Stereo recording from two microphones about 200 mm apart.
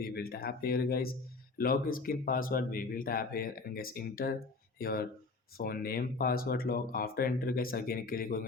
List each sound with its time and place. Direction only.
0.0 s speech: 50° left (ahead or behind)